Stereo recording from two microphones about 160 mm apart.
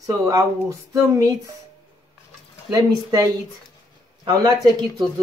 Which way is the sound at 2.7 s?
20° right (ahead or behind).